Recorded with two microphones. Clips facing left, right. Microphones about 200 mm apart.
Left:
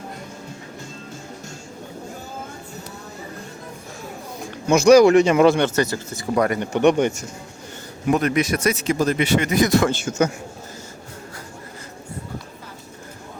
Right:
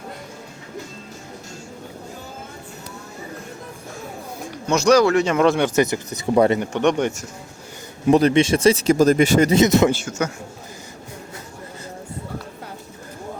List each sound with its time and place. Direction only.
4.6 s speech: 10° left (ahead or behind)
5.5 s speech: 5° right (ahead or behind)
5.7 s speech: 20° right (ahead or behind)
6.7 s speech: 5° left (ahead or behind)
8.0 s speech: 30° right (ahead or behind)
9.5 s speech: 25° right (ahead or behind)
10.1 s a man's voice: 20° left (ahead or behind)